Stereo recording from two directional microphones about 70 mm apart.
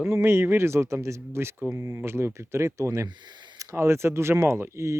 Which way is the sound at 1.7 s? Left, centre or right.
Right.